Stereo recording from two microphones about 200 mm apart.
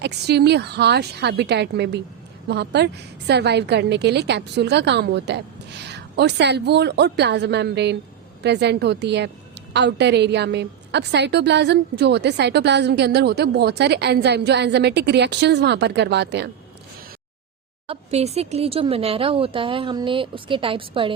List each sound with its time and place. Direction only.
0.0 s a woman's voice: 55° right (ahead or behind)
17.8 s speech: 30° right (ahead or behind)